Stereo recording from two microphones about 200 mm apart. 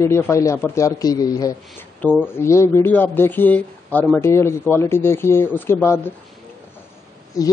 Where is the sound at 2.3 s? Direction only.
15° left (ahead or behind).